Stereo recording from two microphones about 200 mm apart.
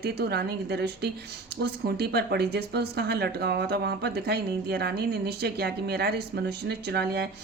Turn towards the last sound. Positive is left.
turn(degrees=-55)  # may be behind; listen again after turning